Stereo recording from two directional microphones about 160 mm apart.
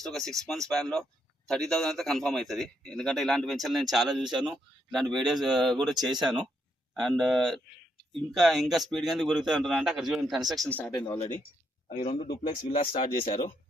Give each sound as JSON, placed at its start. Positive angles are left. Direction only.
{"t": 0.0, "sound": "a man's voice", "side_deg": 0}
{"t": 5.9, "sound": "speech", "side_deg": -25}
{"t": 7.0, "sound": "a man's voice", "side_deg": 0}
{"t": 10.9, "sound": "speech", "side_deg": 25}
{"t": 11.9, "sound": "speech", "side_deg": 45}
{"t": 13.2, "sound": "speech", "side_deg": 55}